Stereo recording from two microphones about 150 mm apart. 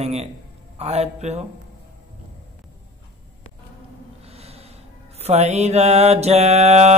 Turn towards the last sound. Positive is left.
turn(degrees=-45)  # may be behind; listen again after turning